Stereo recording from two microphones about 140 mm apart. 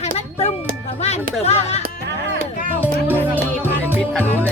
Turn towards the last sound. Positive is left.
turn(degrees=-15)  # may be behind; listen again after turning